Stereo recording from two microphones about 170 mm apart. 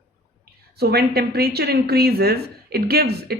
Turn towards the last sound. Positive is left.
turn(degrees=-65)  # may be behind; listen again after turning